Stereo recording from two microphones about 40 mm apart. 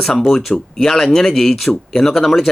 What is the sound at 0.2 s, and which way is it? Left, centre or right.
A man's voice, centre.